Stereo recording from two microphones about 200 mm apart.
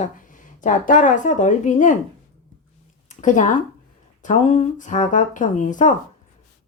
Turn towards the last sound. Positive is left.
turn(degrees=40)  # may be behind; listen again after turning